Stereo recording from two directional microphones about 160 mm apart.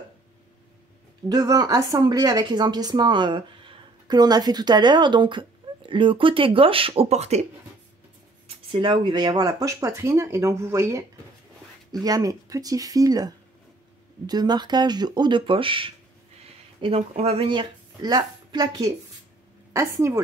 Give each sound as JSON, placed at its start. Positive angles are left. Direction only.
{"t": 1.3, "sound": "a woman's voice", "side_deg": -25}
{"t": 8.7, "sound": "a woman's voice", "side_deg": -30}